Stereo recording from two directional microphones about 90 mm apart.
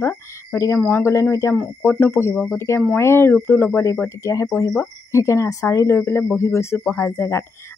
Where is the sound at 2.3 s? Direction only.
5° left (ahead or behind).